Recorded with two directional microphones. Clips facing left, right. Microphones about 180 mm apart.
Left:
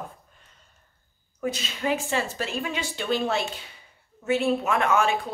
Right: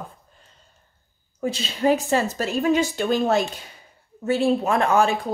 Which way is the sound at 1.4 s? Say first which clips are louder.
Right 6 dB; 30° right (ahead or behind).